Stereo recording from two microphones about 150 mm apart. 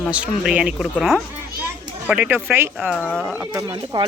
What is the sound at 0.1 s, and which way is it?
Speech, 10° right (ahead or behind).